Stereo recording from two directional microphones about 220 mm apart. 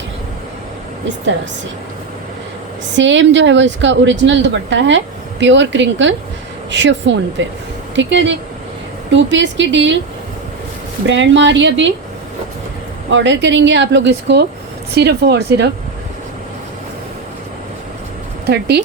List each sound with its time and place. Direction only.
2.9 s a woman's voice: 55° right (ahead or behind)
11.0 s a woman's voice: 55° right (ahead or behind)
13.1 s speech: 55° right (ahead or behind)
18.4 s speech: 50° right (ahead or behind)